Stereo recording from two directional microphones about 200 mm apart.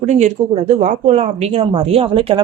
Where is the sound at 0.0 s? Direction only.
35° right (ahead or behind).